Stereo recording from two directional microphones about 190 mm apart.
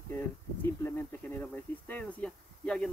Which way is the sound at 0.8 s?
10° left (ahead or behind).